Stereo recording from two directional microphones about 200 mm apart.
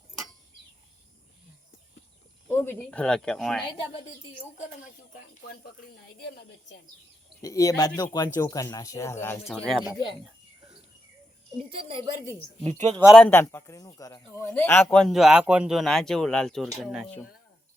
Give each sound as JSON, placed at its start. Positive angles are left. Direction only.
{"t": 2.5, "sound": "speech", "side_deg": 10}
{"t": 3.6, "sound": "speech", "side_deg": 25}
{"t": 5.1, "sound": "speech", "side_deg": 50}
{"t": 7.4, "sound": "speech", "side_deg": 15}
{"t": 9.5, "sound": "speech", "side_deg": 0}
{"t": 11.7, "sound": "a woman's voice", "side_deg": -25}
{"t": 13.1, "sound": "speech", "side_deg": 5}